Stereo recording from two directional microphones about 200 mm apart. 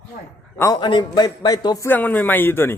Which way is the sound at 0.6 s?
20° left (ahead or behind).